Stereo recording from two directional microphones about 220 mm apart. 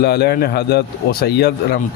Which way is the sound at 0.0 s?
50° left (ahead or behind).